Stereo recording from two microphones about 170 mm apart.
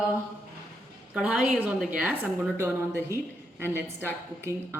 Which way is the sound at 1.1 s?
10° right (ahead or behind).